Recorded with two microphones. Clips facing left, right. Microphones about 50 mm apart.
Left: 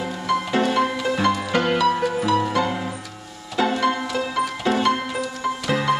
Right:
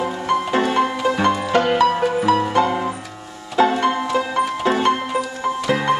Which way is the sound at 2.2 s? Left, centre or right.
Right.